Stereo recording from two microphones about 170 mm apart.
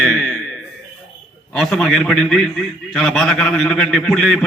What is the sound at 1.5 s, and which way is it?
A man's voice, centre (ahead or behind).